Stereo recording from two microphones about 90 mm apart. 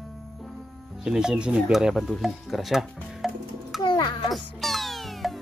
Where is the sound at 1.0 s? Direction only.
10° right (ahead or behind).